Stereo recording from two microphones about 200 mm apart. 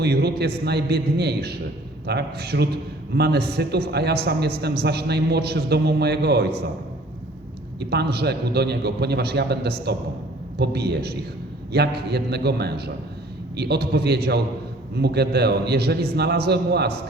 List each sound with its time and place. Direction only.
0.0 s a man's voice: 55° right (ahead or behind)
7.8 s a man's voice: 55° right (ahead or behind)